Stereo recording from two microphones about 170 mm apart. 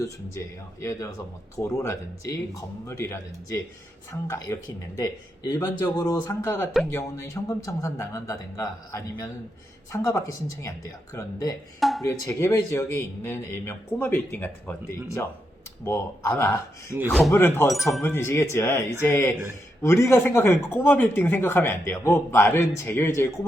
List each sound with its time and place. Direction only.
0.0 s a man's voice: 20° left (ahead or behind)
11.8 s speech: centre (ahead or behind)
12.0 s speech: 20° left (ahead or behind)
17.1 s speech: centre (ahead or behind)
17.3 s speech: 15° left (ahead or behind)
17.7 s speech: centre (ahead or behind)
18.0 s speech: 15° left (ahead or behind)